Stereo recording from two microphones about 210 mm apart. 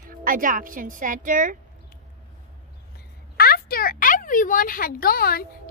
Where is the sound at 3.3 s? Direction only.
45° left (ahead or behind).